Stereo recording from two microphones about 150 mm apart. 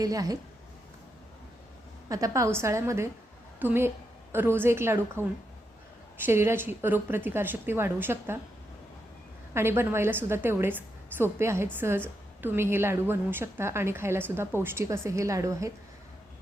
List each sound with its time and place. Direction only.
0.0 s a woman's voice: 25° right (ahead or behind)
2.0 s a woman's voice: 20° right (ahead or behind)
6.2 s a woman's voice: 15° right (ahead or behind)
9.6 s a woman's voice: 15° right (ahead or behind)